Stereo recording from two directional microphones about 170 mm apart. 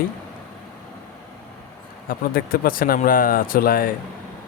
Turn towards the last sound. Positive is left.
turn(degrees=55)  # may be behind; listen again after turning